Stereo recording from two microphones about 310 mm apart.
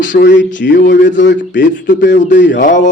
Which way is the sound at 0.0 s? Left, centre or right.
Left.